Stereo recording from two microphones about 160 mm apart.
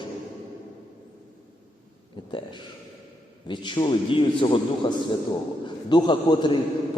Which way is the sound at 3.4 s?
30° left (ahead or behind).